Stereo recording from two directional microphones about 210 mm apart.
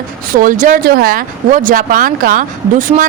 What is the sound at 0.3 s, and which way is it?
Speech, 40° right (ahead or behind).